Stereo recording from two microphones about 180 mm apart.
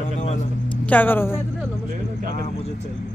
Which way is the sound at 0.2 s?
35° left (ahead or behind).